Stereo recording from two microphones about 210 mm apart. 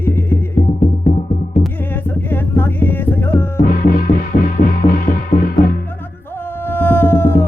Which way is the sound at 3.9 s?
40° left (ahead or behind).